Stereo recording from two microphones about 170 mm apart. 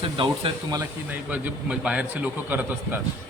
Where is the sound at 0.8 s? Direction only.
10° right (ahead or behind).